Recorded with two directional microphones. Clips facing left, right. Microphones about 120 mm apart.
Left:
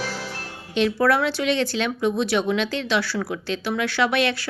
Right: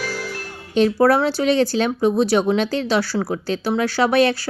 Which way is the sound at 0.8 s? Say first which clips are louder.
Right 4 dB; 35° right (ahead or behind).